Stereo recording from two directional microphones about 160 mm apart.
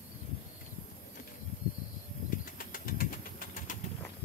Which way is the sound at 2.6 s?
60° left (ahead or behind).